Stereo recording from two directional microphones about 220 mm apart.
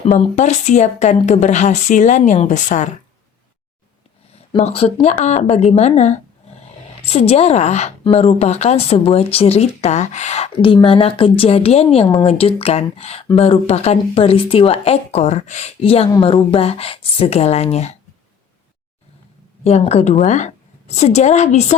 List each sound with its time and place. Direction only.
0.0 s speech: 30° left (ahead or behind)
4.5 s a woman's voice: 30° left (ahead or behind)
19.6 s speech: 30° left (ahead or behind)